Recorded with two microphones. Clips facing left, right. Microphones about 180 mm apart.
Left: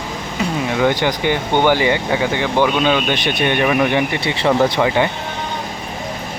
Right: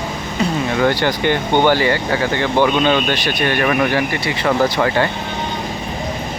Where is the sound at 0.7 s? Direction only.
15° left (ahead or behind).